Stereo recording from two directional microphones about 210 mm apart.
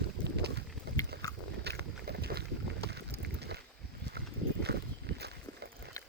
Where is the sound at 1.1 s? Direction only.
50° right (ahead or behind).